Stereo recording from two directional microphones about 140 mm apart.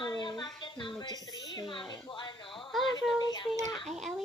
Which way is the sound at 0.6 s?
35° left (ahead or behind).